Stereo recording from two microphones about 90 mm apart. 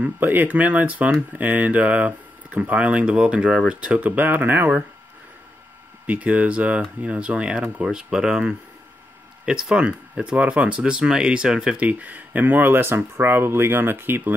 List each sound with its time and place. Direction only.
0.0 s speech: 20° right (ahead or behind)
6.0 s speech: 15° right (ahead or behind)